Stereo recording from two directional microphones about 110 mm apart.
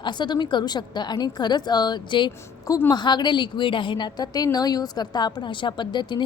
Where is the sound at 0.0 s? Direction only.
45° left (ahead or behind).